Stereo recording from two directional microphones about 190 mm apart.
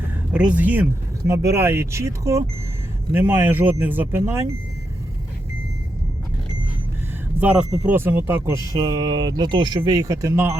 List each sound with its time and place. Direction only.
0.3 s speech: 5° right (ahead or behind)
7.3 s speech: 5° right (ahead or behind)